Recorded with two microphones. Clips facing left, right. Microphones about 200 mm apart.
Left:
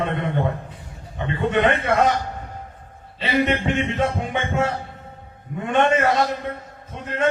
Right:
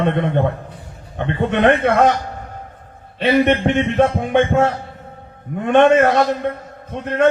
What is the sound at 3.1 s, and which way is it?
A man's voice, 60° right (ahead or behind).